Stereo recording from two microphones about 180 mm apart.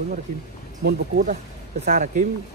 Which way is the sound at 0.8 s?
55° right (ahead or behind).